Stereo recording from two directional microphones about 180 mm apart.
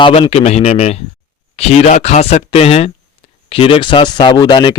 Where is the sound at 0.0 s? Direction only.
30° left (ahead or behind).